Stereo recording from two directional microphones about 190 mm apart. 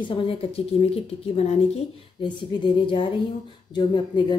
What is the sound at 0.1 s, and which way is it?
A woman's voice, 30° left (ahead or behind).